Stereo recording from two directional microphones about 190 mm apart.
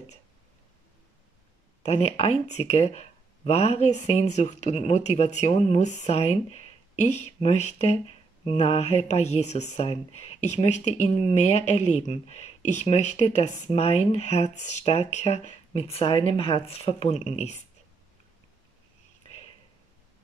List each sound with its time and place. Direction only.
1.8 s speech: 35° left (ahead or behind)